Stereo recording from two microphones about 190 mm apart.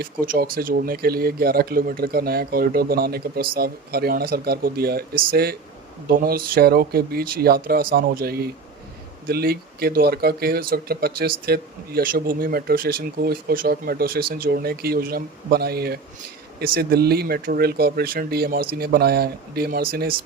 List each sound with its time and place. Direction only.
0.0 s speech: 50° right (ahead or behind)